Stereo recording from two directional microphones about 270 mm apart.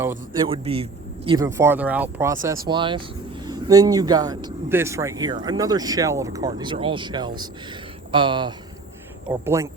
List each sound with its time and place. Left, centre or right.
0.4 s speech: right